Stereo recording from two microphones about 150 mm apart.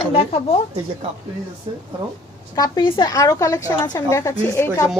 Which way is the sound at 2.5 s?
25° left (ahead or behind).